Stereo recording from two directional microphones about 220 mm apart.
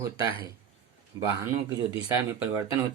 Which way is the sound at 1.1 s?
15° right (ahead or behind).